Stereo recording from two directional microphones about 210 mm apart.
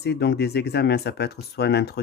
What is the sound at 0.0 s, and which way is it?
Speech, 50° left (ahead or behind).